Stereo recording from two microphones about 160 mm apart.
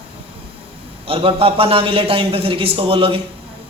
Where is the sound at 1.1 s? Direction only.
35° right (ahead or behind).